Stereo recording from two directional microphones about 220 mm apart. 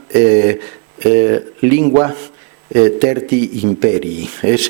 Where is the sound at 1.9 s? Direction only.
30° right (ahead or behind).